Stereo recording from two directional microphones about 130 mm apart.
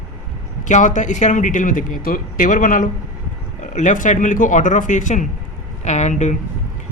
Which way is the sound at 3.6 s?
70° left (ahead or behind).